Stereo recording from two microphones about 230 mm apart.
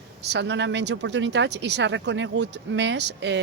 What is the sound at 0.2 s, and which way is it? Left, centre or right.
Speech, right.